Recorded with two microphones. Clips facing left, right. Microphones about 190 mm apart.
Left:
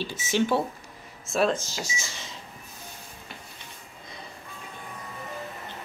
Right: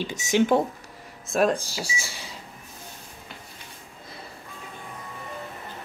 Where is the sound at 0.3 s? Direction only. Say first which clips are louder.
Right 4 dB; 15° right (ahead or behind).